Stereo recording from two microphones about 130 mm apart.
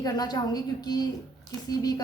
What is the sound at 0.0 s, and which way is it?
A woman's voice, 30° left (ahead or behind).